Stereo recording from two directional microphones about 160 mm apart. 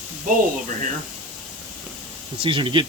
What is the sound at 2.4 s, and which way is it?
Speech, 30° right (ahead or behind).